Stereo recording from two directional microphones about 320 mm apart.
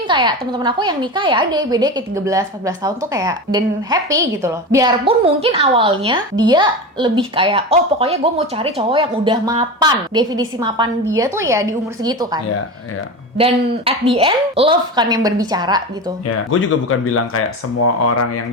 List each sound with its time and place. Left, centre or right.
0.1 s speech: centre
16.2 s speech: left